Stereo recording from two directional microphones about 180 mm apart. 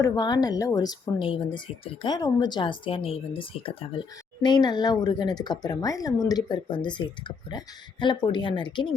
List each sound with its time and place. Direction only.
0.0 s speech: 20° left (ahead or behind)